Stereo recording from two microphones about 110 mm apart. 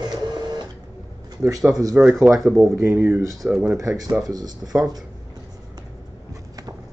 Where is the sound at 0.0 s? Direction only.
40° right (ahead or behind).